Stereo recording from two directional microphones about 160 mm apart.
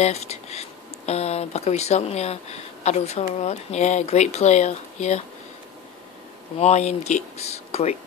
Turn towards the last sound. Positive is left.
turn(degrees=40)  # may be behind; listen again after turning